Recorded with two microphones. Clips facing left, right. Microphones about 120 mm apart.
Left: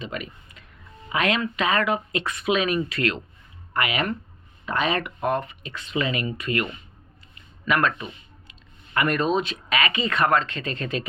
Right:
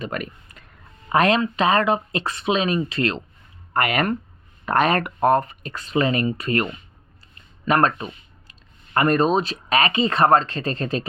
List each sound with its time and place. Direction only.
0.0 s speech: 50° right (ahead or behind)
1.1 s speech: 40° right (ahead or behind)
3.7 s speech: 45° right (ahead or behind)